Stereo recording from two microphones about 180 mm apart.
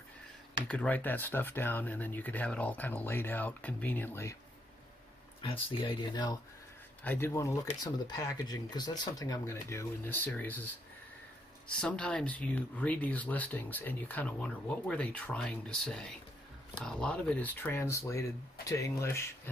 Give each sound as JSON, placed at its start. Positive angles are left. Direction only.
{"t": 0.7, "sound": "speech", "side_deg": 5}
{"t": 5.4, "sound": "speech", "side_deg": 30}
{"t": 7.0, "sound": "speech", "side_deg": 10}